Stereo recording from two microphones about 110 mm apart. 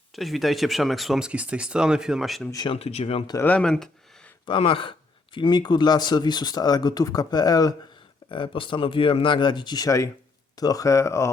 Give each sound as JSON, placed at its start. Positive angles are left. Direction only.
{"t": 0.2, "sound": "speech", "side_deg": 0}
{"t": 2.6, "sound": "speech", "side_deg": 70}
{"t": 3.4, "sound": "speech", "side_deg": 10}
{"t": 4.4, "sound": "speech", "side_deg": 55}
{"t": 8.3, "sound": "speech", "side_deg": 50}